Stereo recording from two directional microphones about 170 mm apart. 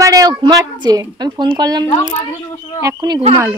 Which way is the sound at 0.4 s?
25° right (ahead or behind).